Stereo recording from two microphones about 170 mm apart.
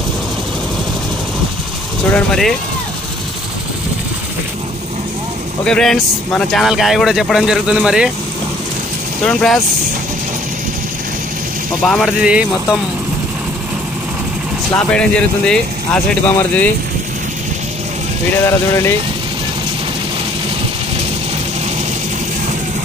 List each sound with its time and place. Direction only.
2.0 s speech: 5° left (ahead or behind)
5.7 s speech: 5° left (ahead or behind)
9.2 s speech: 5° left (ahead or behind)
11.8 s speech: 5° left (ahead or behind)
14.7 s speech: 5° left (ahead or behind)
18.4 s speech: 15° left (ahead or behind)